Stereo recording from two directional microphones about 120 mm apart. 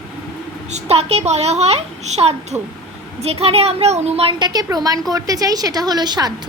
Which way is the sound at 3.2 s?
55° right (ahead or behind).